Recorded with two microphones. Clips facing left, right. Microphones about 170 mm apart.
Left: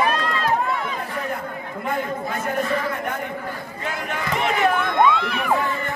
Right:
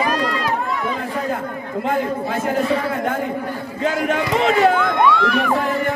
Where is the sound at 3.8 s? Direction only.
90° right; by 5.9 s 70° right (ahead or behind).